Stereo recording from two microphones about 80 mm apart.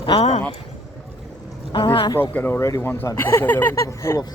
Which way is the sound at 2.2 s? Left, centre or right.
Left.